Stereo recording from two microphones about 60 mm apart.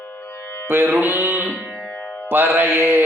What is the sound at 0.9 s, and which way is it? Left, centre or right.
Music, right.